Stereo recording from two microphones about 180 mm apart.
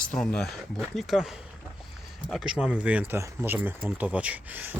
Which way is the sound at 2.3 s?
5° right (ahead or behind).